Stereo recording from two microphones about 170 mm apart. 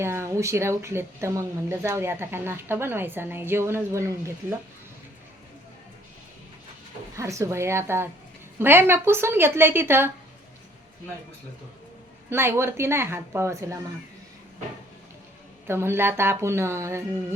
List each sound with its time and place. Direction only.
0.0 s speech: 15° right (ahead or behind)
7.2 s speech: 15° right (ahead or behind)
12.3 s speech: 15° right (ahead or behind)
15.6 s speech: 15° right (ahead or behind)